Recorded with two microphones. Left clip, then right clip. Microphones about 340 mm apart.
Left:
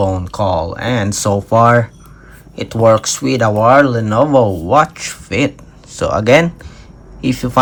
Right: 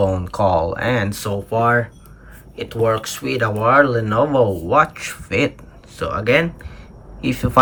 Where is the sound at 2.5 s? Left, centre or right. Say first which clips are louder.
Left 8 dB; centre.